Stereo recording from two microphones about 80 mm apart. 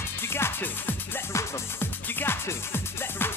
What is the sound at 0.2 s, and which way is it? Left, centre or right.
Music, left.